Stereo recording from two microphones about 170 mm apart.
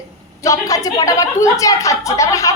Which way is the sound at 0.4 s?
20° left (ahead or behind).